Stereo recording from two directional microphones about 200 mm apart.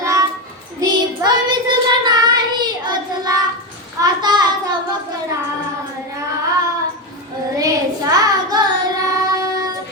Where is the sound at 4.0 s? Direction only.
20° right (ahead or behind).